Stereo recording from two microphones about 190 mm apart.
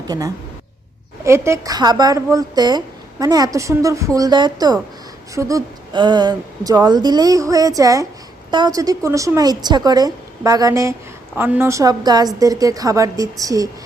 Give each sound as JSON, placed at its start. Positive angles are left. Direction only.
{"t": 1.2, "sound": "a woman's voice", "side_deg": -15}